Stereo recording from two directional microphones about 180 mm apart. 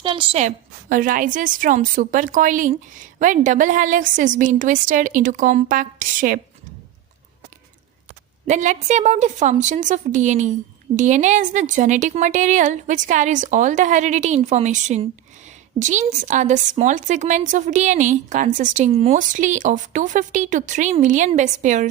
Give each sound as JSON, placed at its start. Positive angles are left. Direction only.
{"t": 0.0, "sound": "a woman's voice", "side_deg": -30}
{"t": 8.4, "sound": "a woman's voice", "side_deg": -40}